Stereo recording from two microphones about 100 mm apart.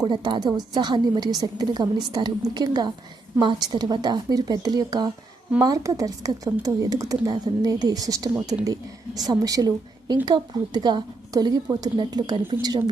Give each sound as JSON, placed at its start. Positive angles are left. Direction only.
{"t": 0.1, "sound": "a woman's voice", "side_deg": -45}